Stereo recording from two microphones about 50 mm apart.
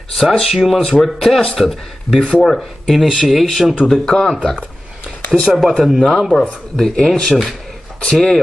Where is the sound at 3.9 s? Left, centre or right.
Centre.